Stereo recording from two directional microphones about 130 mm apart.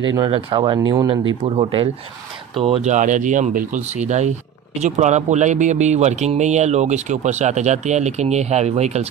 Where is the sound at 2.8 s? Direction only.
70° right (ahead or behind).